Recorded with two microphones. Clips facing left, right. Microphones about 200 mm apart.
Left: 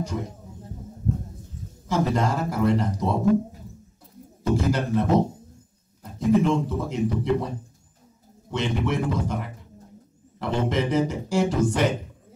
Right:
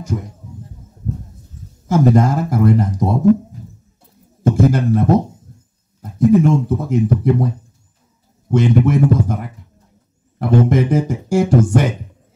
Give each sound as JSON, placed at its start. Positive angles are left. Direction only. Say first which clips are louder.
{"t": 1.9, "sound": "a man's voice", "louder": "right 9 dB", "side_deg": -50}
{"t": 4.4, "sound": "speech", "louder": "right 8 dB", "side_deg": -50}
{"t": 6.1, "sound": "a man's voice", "louder": "right 7 dB", "side_deg": -50}
{"t": 8.5, "sound": "a man's voice", "louder": "right 11 dB", "side_deg": -50}